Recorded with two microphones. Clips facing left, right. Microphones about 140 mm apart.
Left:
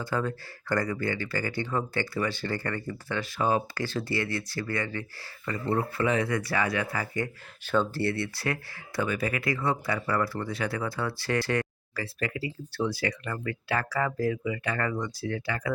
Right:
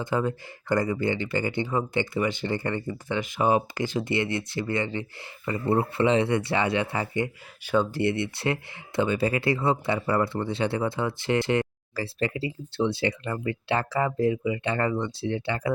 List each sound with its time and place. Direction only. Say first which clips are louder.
0.0 s speech: right 3 dB; 20° right (ahead or behind)
7.6 s speech: right 3 dB; 15° right (ahead or behind); by 15.7 s 30° right (ahead or behind)